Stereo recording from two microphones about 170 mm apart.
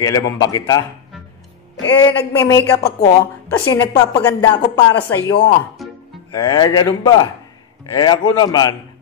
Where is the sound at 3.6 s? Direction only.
20° left (ahead or behind).